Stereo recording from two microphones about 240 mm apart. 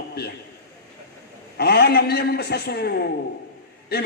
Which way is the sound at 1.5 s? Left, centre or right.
Left.